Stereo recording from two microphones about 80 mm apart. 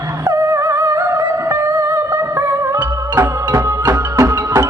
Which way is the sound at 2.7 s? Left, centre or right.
Right.